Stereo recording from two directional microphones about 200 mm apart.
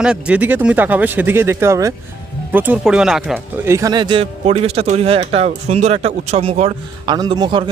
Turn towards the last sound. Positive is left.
turn(degrees=-25)  # may be behind; listen again after turning